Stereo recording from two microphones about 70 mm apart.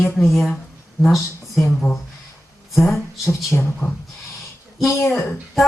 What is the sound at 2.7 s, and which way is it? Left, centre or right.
Speech, centre.